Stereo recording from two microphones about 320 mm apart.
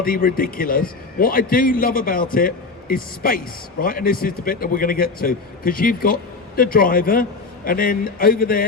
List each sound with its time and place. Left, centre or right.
0.0 s a man's voice: left